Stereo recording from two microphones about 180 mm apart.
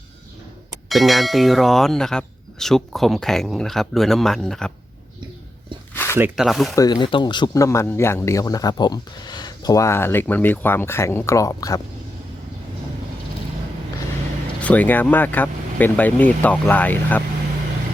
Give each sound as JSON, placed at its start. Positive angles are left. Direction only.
{"t": 0.9, "sound": "speech", "side_deg": 0}
{"t": 5.9, "sound": "zipper", "side_deg": 10}
{"t": 6.1, "sound": "speech", "side_deg": -5}
{"t": 6.7, "sound": "speech", "side_deg": 20}
{"t": 14.6, "sound": "speech", "side_deg": 10}